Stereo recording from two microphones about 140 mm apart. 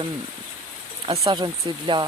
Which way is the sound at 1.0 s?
45° right (ahead or behind).